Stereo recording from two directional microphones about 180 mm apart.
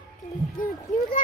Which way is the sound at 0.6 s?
50° left (ahead or behind).